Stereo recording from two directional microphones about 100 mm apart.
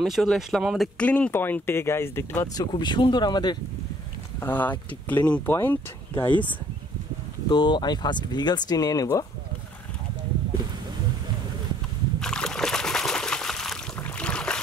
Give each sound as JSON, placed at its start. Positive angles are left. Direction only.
{"t": 0.0, "sound": "speech", "side_deg": 0}
{"t": 0.9, "sound": "speech", "side_deg": 10}
{"t": 2.4, "sound": "speech", "side_deg": 40}
{"t": 2.7, "sound": "speech", "side_deg": 50}
{"t": 4.4, "sound": "speech", "side_deg": 20}
{"t": 7.4, "sound": "speech", "side_deg": 50}
{"t": 12.2, "sound": "trickle", "side_deg": 5}
{"t": 14.0, "sound": "boat", "side_deg": 10}